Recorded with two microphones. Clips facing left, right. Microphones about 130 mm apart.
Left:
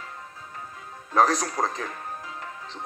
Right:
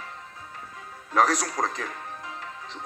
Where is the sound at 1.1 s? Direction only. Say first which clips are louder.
Left 1 dB; 30° left (ahead or behind).